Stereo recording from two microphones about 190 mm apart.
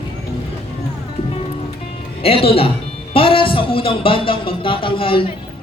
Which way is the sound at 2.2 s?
30° left (ahead or behind).